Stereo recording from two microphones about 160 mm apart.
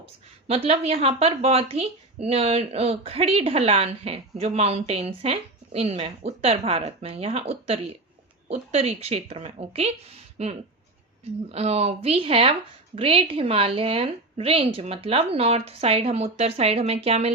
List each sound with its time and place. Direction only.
0.0 s a woman's voice: 40° right (ahead or behind)